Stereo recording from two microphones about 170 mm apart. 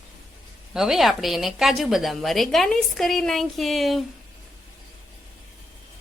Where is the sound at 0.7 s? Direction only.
Centre (ahead or behind).